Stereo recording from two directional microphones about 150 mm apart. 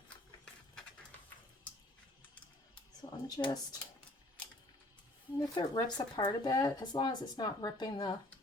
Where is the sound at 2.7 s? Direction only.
25° left (ahead or behind).